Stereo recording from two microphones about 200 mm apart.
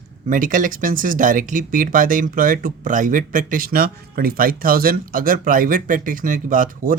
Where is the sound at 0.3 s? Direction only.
40° right (ahead or behind).